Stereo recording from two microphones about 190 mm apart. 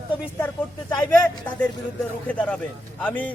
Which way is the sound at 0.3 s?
10° left (ahead or behind).